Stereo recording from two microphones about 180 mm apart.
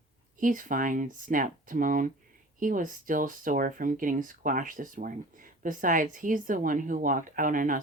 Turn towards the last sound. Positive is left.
turn(degrees=-50)  # may be behind; listen again after turning